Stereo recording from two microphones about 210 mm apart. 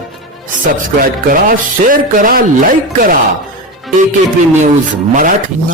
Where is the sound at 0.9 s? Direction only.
40° right (ahead or behind).